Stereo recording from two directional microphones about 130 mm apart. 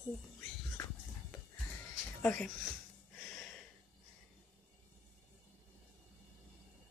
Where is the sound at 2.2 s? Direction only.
10° left (ahead or behind).